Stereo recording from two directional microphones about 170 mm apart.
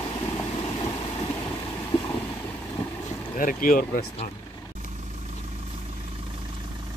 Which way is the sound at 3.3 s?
50° left (ahead or behind).